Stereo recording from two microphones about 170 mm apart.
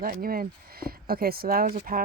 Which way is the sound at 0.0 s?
60° right (ahead or behind).